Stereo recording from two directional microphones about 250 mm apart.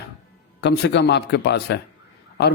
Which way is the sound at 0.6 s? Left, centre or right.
Left.